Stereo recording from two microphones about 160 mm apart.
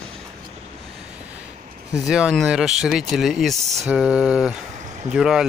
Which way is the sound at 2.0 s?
5° right (ahead or behind).